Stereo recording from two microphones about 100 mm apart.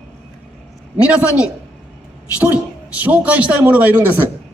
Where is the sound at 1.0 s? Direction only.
15° right (ahead or behind).